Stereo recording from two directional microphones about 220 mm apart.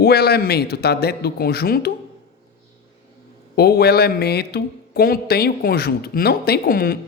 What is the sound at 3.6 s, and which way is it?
Speech, 45° left (ahead or behind).